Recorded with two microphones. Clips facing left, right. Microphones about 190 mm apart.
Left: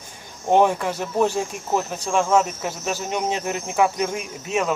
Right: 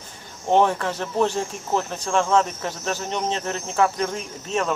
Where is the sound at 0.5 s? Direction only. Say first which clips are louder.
Left 1 dB; 10° left (ahead or behind).